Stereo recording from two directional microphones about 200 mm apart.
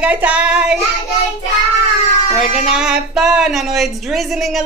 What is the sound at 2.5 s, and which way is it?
Speech, 5° right (ahead or behind).